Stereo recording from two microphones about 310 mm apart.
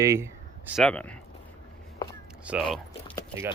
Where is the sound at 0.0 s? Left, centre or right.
Centre.